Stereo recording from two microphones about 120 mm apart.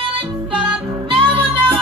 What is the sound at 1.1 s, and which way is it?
Music, 45° right (ahead or behind).